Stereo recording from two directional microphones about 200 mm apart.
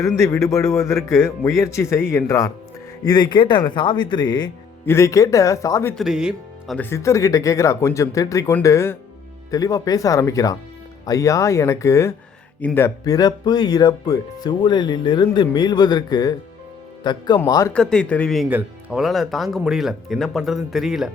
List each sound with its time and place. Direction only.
0.0 s a man's voice: 15° left (ahead or behind)
5.9 s speech: centre (ahead or behind)
6.7 s a man's voice: 10° left (ahead or behind)
17.7 s speech: 5° left (ahead or behind)